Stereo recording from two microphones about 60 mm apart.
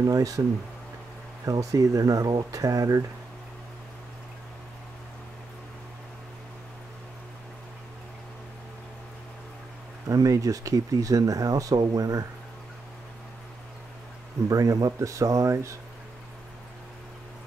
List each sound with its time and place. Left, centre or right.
0.0 s speech: right
1.4 s speech: right
10.0 s speech: right
14.5 s speech: right